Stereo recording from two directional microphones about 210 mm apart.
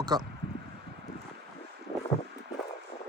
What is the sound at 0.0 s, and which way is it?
Speech, 20° right (ahead or behind).